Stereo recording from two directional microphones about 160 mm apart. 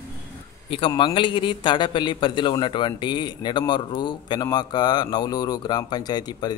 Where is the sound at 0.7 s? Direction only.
30° left (ahead or behind).